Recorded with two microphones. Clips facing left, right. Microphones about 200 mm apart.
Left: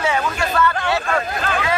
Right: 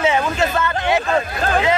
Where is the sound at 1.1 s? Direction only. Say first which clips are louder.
Right 3 dB; 35° right (ahead or behind).